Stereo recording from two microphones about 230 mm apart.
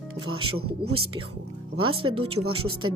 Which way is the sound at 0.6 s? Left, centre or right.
Right.